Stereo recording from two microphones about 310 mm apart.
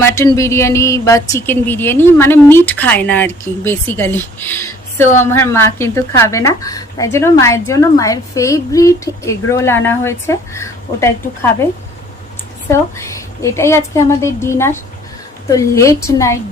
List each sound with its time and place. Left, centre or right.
0.0 s speech: centre
13.0 s speech: centre